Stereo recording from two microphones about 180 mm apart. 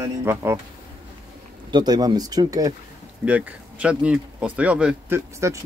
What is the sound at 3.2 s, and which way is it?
Speech, 5° right (ahead or behind).